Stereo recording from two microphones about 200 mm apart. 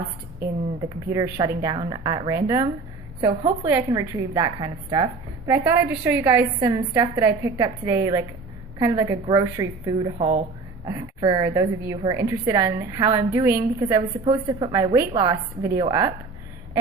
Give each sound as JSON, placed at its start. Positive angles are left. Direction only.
{"t": 1.1, "sound": "a woman's voice", "side_deg": -15}
{"t": 5.5, "sound": "a woman's voice", "side_deg": -10}
{"t": 10.2, "sound": "speech", "side_deg": -30}
{"t": 10.8, "sound": "a woman's voice", "side_deg": -20}